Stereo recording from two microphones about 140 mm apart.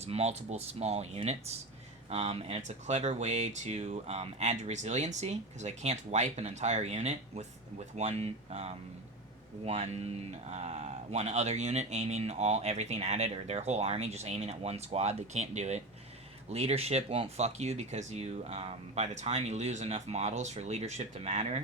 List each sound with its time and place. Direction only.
0.0 s speech: 50° right (ahead or behind)